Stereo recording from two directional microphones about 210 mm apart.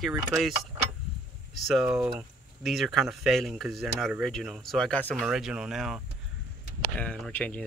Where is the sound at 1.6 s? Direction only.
Centre (ahead or behind).